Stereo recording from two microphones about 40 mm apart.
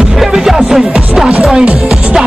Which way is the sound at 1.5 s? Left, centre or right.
Right.